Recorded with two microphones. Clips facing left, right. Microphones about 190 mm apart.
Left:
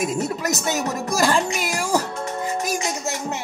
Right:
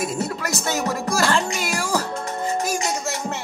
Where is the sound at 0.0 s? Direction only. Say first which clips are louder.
Left 2 dB; 15° left (ahead or behind).